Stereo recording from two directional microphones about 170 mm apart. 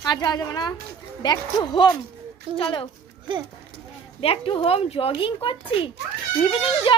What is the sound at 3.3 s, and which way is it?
Speech, 30° right (ahead or behind).